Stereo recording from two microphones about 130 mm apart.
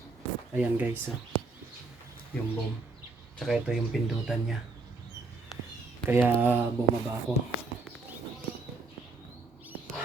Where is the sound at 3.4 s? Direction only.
Centre (ahead or behind).